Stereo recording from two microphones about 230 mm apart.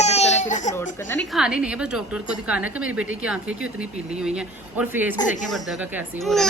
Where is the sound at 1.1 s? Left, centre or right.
Centre.